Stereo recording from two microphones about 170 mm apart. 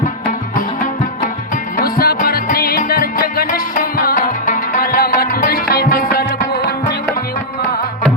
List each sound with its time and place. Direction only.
1.7 s music: 60° left (ahead or behind)